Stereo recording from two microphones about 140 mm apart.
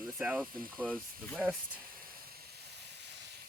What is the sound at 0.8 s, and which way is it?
Speech, 5° left (ahead or behind).